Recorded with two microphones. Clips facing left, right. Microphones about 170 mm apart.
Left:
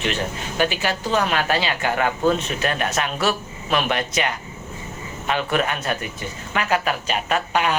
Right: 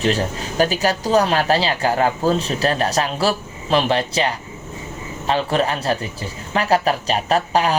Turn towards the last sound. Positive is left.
turn(degrees=-35)  # may be behind; listen again after turning